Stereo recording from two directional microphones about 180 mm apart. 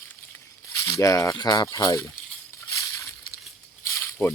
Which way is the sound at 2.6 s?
15° left (ahead or behind).